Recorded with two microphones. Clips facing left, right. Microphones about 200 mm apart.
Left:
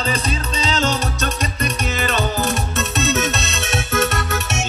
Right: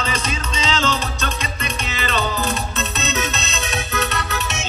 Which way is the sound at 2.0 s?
45° left (ahead or behind).